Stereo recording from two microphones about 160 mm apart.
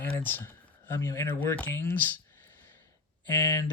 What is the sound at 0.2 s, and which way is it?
Speech, 10° left (ahead or behind).